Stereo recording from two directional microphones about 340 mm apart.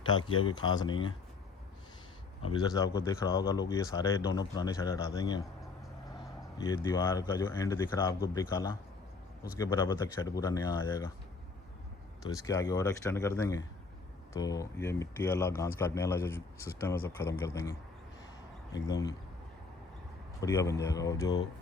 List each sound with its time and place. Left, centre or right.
0.3 s speech: left
0.5 s a man's voice: centre
2.4 s a man's voice: centre
12.2 s a man's voice: centre
20.4 s a man's voice: centre